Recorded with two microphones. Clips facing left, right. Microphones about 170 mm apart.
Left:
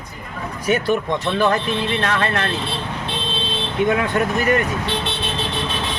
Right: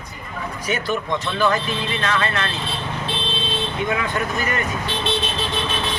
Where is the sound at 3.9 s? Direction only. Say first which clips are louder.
Left 4 dB; 60° left (ahead or behind).